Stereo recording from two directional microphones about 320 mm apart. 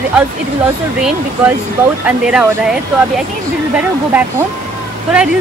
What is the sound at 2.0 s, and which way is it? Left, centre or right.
A woman's voice, centre.